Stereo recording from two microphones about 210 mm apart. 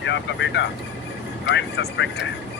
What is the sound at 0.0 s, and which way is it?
Speech, 60° left (ahead or behind).